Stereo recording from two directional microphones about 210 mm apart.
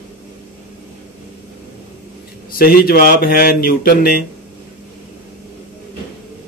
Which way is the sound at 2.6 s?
45° left (ahead or behind).